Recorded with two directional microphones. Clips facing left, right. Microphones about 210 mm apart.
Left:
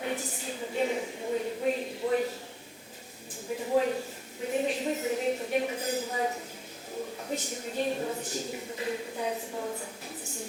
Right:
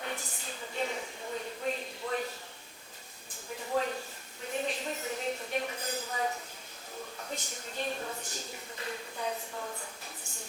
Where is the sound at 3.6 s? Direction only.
10° left (ahead or behind).